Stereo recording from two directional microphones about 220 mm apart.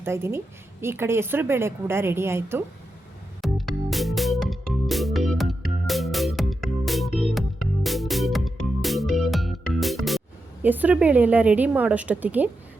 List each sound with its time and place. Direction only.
0.0 s a woman's voice: 10° right (ahead or behind)
3.4 s music: centre (ahead or behind)